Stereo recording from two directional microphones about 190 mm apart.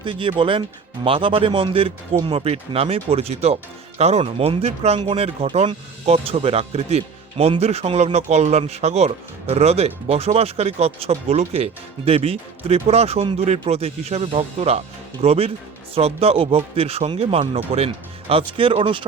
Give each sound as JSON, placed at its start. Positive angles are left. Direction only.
{"t": 0.0, "sound": "speech", "side_deg": -25}